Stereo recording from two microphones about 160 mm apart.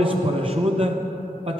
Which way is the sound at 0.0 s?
35° right (ahead or behind).